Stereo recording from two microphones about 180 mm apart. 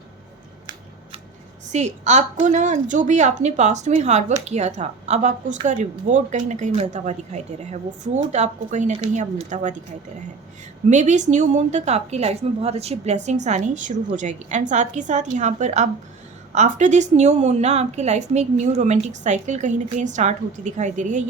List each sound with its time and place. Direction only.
1.7 s a woman's voice: 40° right (ahead or behind)
10.8 s a woman's voice: 40° right (ahead or behind)